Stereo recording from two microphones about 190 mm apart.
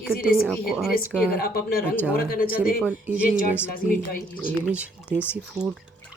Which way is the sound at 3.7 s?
50° left (ahead or behind).